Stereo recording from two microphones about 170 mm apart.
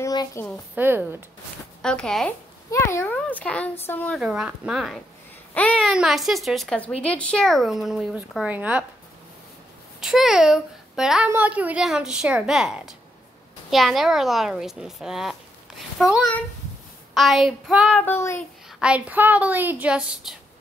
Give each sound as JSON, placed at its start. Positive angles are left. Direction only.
{"t": 0.0, "sound": "a sound", "side_deg": 20}
{"t": 0.7, "sound": "a woman's voice", "side_deg": -10}
{"t": 1.8, "sound": "speech", "side_deg": 5}
{"t": 2.7, "sound": "a child's voice", "side_deg": 15}
{"t": 4.2, "sound": "a child's voice", "side_deg": -5}
{"t": 9.9, "sound": "speech", "side_deg": -5}
{"t": 17.9, "sound": "a child's voice", "side_deg": 15}
{"t": 18.7, "sound": "a woman's voice", "side_deg": -5}